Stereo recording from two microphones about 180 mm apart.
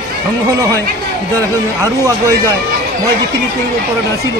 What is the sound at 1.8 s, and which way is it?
Speech, 20° right (ahead or behind).